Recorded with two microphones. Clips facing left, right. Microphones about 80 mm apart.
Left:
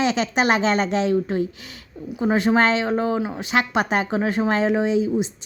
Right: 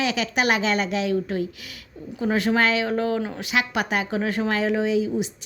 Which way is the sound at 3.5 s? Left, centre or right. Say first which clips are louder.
Left 3 dB; left.